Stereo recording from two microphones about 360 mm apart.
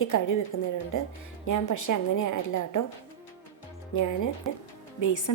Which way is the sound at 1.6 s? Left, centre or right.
Left.